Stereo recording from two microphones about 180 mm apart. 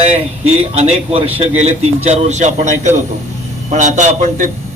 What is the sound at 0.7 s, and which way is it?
A man's voice, 35° right (ahead or behind).